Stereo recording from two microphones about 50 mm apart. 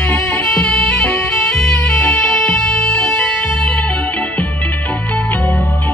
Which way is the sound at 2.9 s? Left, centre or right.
Left.